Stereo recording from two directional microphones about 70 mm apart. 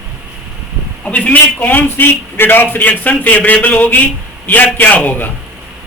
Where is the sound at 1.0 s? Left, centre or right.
Centre.